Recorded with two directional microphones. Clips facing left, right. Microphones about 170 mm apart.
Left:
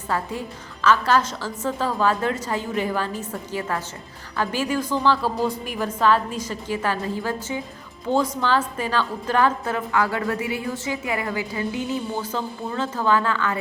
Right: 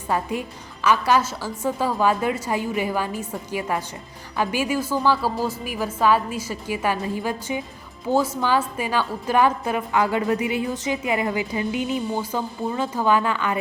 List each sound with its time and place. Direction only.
0.1 s a woman's voice: 15° right (ahead or behind)